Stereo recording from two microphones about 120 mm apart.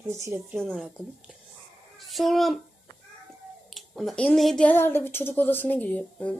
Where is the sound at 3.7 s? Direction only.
Centre (ahead or behind).